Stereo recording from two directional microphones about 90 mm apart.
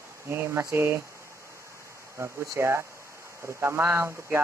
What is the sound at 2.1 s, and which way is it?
Speech, 30° right (ahead or behind).